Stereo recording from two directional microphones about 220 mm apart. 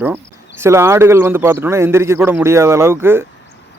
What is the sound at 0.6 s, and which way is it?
Speech, 10° right (ahead or behind).